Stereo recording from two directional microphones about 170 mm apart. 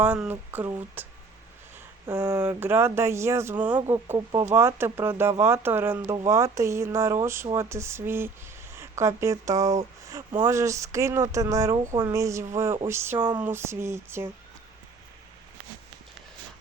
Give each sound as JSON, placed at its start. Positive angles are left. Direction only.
{"t": 0.0, "sound": "speech", "side_deg": -10}
{"t": 13.1, "sound": "a sound", "side_deg": -25}
{"t": 13.4, "sound": "speech", "side_deg": -15}